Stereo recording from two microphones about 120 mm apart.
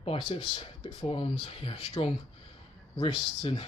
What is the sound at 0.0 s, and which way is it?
Speech, 50° left (ahead or behind).